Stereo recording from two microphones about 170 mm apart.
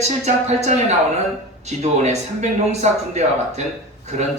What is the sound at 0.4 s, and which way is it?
Speech, 40° right (ahead or behind).